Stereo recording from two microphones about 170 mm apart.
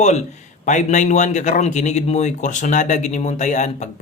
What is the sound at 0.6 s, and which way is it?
A man's voice, 45° left (ahead or behind).